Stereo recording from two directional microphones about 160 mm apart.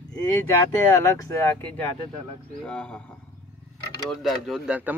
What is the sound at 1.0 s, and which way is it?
Speech, 20° left (ahead or behind).